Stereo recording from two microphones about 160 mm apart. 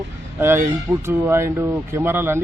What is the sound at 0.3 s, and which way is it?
Speech, 15° right (ahead or behind).